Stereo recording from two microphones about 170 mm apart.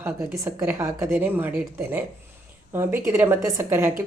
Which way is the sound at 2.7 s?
15° right (ahead or behind).